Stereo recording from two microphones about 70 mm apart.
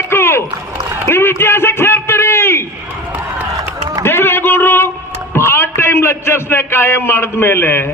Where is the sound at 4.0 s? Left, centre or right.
Left.